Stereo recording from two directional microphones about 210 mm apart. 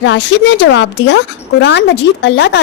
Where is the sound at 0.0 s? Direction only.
60° left (ahead or behind).